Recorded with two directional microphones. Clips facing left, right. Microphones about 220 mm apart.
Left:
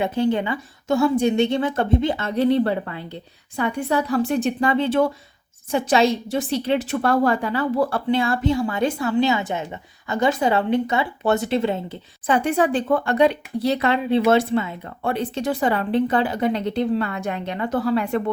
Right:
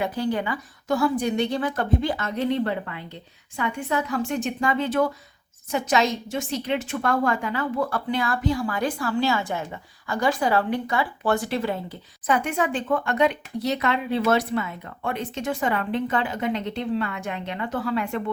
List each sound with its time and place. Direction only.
0.0 s a woman's voice: 25° left (ahead or behind)